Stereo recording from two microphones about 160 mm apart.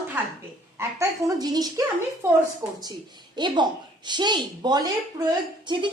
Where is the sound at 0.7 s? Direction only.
20° right (ahead or behind).